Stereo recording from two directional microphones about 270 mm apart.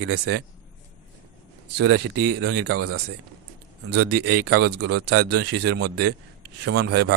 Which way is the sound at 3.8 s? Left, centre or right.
Right.